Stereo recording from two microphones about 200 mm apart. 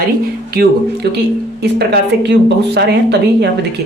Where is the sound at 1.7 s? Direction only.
60° right (ahead or behind).